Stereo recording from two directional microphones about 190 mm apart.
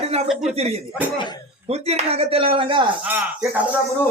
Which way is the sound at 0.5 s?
30° right (ahead or behind).